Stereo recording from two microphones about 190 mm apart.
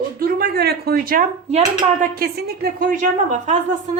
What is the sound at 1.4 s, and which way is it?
Speech, 35° right (ahead or behind).